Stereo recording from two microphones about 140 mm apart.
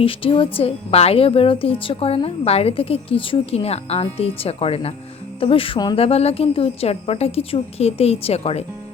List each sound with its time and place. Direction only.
0.0 s a woman's voice: 40° left (ahead or behind)
6.0 s a woman's voice: 45° left (ahead or behind)